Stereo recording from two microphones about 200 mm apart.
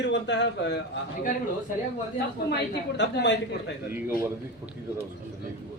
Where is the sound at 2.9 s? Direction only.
60° left (ahead or behind).